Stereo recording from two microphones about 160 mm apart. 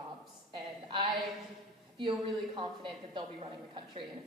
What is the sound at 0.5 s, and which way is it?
A woman's voice, 30° right (ahead or behind).